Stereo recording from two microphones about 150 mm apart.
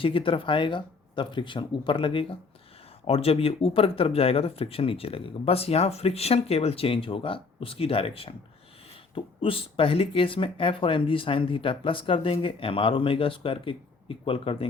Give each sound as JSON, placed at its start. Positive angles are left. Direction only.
{"t": 0.0, "sound": "speech", "side_deg": 35}